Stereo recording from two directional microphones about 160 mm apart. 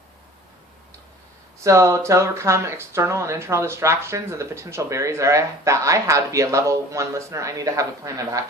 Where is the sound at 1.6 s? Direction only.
20° right (ahead or behind).